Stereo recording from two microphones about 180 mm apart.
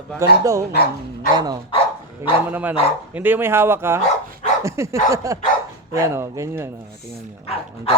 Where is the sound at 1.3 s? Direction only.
20° right (ahead or behind).